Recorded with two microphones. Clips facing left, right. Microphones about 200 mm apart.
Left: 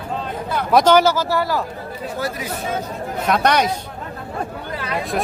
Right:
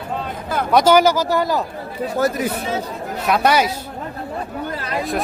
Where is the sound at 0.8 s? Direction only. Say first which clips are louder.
Right 1 dB; 15° right (ahead or behind).